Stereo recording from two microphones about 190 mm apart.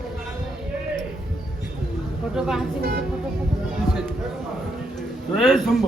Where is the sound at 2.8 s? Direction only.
55° right (ahead or behind).